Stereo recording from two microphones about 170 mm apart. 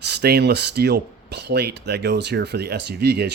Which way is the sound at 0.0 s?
75° right (ahead or behind).